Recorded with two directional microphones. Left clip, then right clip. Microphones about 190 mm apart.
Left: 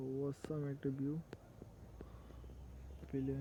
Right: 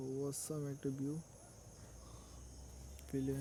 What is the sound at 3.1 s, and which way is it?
Speech, 30° right (ahead or behind).